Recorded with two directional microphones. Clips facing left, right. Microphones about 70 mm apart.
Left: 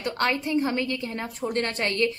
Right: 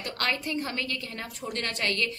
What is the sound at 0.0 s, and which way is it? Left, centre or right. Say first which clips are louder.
A woman's voice: left 5 dB; left.